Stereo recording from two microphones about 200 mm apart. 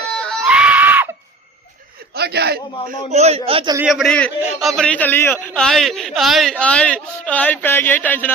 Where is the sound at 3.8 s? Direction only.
Centre (ahead or behind).